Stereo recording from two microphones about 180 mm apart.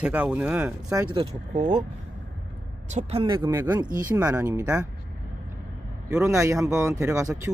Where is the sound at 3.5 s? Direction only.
10° right (ahead or behind).